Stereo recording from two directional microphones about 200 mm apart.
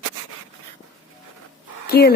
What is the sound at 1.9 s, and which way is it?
Speech, 55° left (ahead or behind).